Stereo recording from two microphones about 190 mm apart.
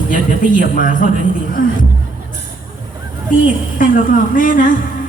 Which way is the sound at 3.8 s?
45° left (ahead or behind).